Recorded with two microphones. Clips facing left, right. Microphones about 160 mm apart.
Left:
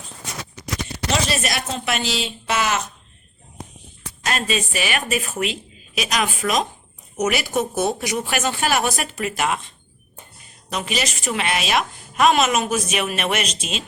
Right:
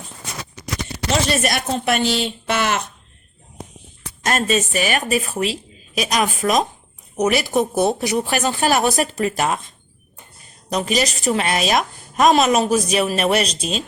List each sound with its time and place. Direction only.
1.4 s a woman's voice: 50° right (ahead or behind)
2.2 s a sound: 55° right (ahead or behind)
4.3 s a woman's voice: 45° right (ahead or behind)